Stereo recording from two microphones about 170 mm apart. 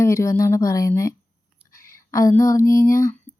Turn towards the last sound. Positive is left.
turn(degrees=15)  # may be behind; listen again after turning